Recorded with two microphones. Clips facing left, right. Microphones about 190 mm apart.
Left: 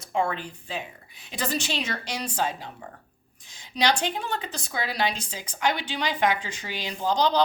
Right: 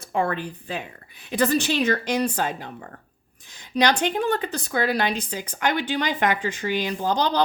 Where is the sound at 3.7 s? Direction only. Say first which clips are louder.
Right 4 dB; 55° right (ahead or behind).